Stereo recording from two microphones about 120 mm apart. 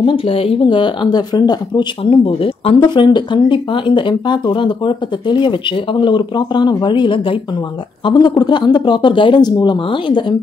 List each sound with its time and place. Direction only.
0.0 s speech: 50° left (ahead or behind)
2.0 s speech: 50° left (ahead or behind)